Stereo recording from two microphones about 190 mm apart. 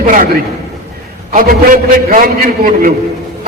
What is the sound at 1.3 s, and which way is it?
Speech, 45° right (ahead or behind).